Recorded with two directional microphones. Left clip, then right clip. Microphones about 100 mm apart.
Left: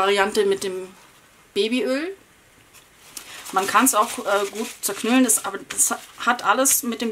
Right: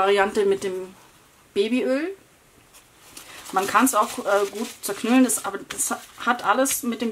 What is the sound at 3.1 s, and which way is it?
Speech, 5° left (ahead or behind).